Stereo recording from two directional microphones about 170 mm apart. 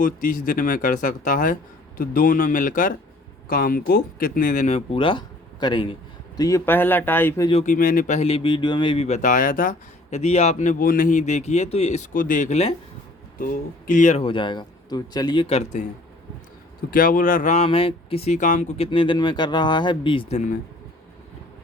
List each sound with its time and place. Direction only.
0.0 s speech: 55° left (ahead or behind); by 7.4 s 10° left (ahead or behind)
7.6 s speech: 55° left (ahead or behind)
13.4 s a man's voice: 55° left (ahead or behind)
16.9 s speech: 55° left (ahead or behind)
18.9 s speech: 30° left (ahead or behind)